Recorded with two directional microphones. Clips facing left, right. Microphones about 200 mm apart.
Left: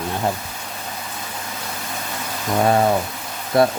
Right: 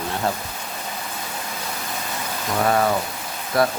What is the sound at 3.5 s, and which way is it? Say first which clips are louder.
Speech: left 4 dB; 25° left (ahead or behind).